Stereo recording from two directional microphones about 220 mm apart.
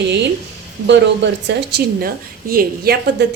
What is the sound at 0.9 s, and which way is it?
Speech, 55° right (ahead or behind).